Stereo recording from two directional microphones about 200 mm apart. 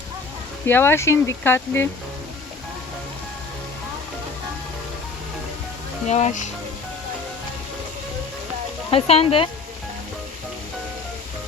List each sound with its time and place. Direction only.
0.7 s speech: 10° left (ahead or behind)
6.1 s speech: 35° left (ahead or behind)
8.9 s speech: 30° left (ahead or behind)